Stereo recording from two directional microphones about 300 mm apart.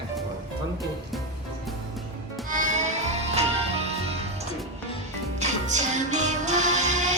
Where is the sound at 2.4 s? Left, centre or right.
Right.